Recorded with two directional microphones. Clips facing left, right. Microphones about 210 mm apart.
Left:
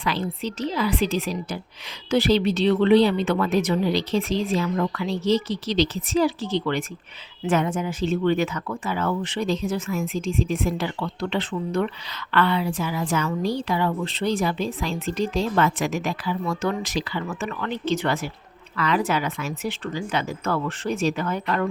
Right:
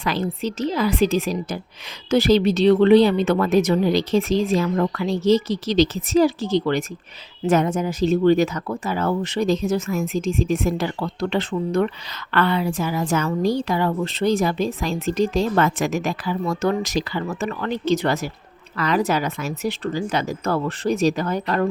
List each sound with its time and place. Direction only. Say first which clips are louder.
0.0 s a woman's voice: right 3 dB; 45° right (ahead or behind)